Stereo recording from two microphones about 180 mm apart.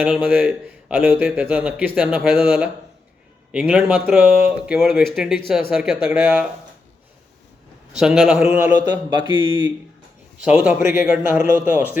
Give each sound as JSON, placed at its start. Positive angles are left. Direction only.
{"t": 0.0, "sound": "a man's voice", "side_deg": -10}
{"t": 7.9, "sound": "a man's voice", "side_deg": 0}
{"t": 9.0, "sound": "speech", "side_deg": -25}
{"t": 10.4, "sound": "a man's voice", "side_deg": -5}